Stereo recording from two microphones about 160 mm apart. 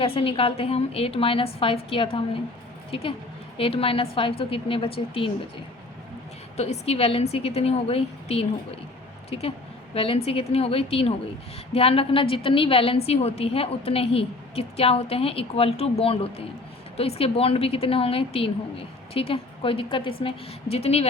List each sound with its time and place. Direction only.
0.0 s a woman's voice: 35° left (ahead or behind)
6.6 s a woman's voice: 40° left (ahead or behind)